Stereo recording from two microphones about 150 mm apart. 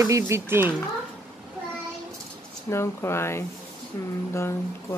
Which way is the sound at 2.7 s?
15° left (ahead or behind).